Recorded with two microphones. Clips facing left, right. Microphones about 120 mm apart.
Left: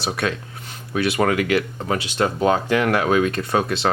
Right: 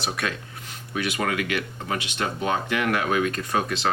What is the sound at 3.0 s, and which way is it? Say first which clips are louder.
Speech: left 5 dB; 70° left (ahead or behind).